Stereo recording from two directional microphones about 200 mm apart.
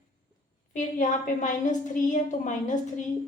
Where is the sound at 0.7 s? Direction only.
40° left (ahead or behind).